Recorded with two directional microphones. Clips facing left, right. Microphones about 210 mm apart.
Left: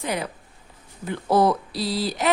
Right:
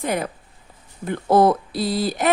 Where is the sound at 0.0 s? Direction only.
50° right (ahead or behind).